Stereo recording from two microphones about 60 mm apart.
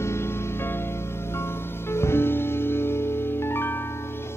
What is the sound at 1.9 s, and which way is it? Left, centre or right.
Music, left.